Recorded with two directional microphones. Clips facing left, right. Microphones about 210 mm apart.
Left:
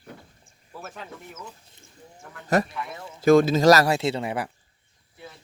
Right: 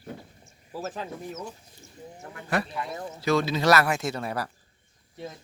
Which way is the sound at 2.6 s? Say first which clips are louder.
Right 2 dB; 30° right (ahead or behind).